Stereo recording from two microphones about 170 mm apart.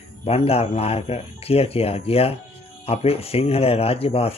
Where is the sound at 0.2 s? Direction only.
35° left (ahead or behind).